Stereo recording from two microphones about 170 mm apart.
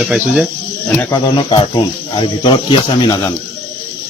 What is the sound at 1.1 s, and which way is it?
Speech, 30° left (ahead or behind).